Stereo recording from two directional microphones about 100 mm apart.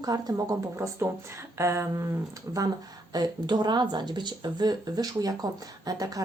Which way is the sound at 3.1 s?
45° right (ahead or behind).